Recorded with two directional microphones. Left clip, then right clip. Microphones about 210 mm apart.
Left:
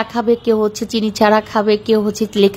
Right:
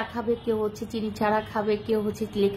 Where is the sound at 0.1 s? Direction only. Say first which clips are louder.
Left 14 dB; 40° left (ahead or behind).